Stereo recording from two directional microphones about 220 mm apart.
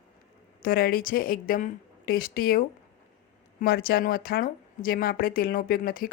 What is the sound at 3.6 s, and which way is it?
A woman's voice, 45° left (ahead or behind).